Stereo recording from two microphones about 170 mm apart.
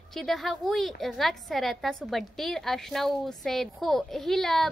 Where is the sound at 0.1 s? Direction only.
Centre (ahead or behind).